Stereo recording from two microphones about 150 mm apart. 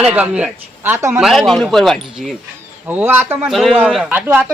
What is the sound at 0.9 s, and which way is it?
Speech, 20° right (ahead or behind).